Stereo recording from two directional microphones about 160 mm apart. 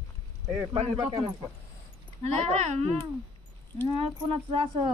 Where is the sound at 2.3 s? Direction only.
45° right (ahead or behind).